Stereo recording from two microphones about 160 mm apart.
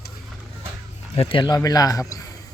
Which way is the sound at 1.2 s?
35° left (ahead or behind).